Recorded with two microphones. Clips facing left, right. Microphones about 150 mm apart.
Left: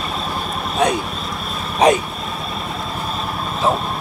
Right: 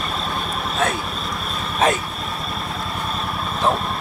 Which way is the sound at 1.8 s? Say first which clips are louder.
Left 5 dB; 15° left (ahead or behind).